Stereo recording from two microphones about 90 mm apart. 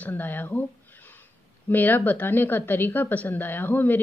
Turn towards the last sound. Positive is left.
turn(degrees=20)  # may be behind; listen again after turning